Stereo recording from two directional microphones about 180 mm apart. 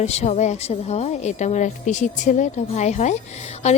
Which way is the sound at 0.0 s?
35° left (ahead or behind).